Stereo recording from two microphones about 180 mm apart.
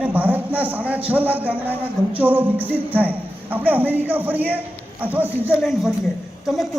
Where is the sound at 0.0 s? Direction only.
10° right (ahead or behind).